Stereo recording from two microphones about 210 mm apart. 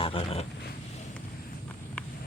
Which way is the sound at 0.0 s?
25° left (ahead or behind).